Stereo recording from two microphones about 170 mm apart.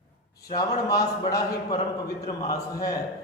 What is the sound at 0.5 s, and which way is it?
A man's voice, 20° left (ahead or behind).